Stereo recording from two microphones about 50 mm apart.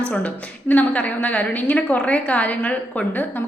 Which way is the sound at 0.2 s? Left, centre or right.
Left.